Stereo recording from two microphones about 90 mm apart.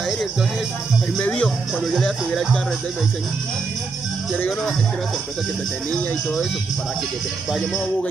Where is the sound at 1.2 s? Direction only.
15° left (ahead or behind).